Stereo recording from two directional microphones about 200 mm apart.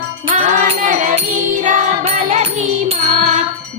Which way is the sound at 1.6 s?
35° right (ahead or behind).